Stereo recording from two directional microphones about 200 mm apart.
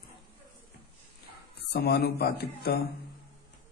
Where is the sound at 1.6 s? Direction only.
55° left (ahead or behind).